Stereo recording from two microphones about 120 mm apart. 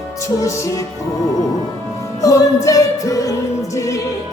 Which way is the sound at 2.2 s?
30° left (ahead or behind).